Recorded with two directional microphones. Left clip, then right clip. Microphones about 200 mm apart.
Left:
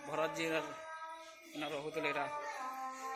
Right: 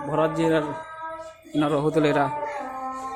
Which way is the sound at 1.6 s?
25° right (ahead or behind).